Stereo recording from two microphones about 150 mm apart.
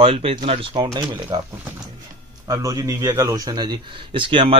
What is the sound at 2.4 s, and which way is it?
A man's voice, 25° right (ahead or behind).